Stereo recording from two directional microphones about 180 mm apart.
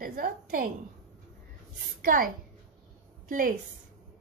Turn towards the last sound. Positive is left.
turn(degrees=-50)  # may be behind; listen again after turning